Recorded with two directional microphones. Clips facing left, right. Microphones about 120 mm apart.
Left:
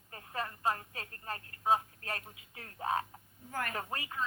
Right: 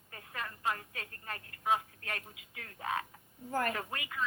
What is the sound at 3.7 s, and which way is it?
Speech, 30° left (ahead or behind).